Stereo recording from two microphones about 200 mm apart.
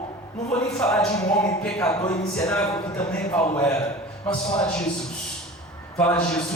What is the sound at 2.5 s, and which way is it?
A man's voice, 5° left (ahead or behind).